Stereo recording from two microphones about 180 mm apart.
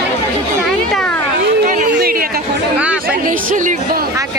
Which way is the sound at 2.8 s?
10° right (ahead or behind).